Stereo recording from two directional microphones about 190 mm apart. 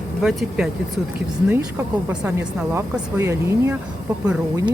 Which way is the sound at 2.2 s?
10° right (ahead or behind).